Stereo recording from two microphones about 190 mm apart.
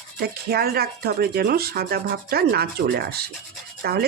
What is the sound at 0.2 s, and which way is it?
Speech, 55° right (ahead or behind).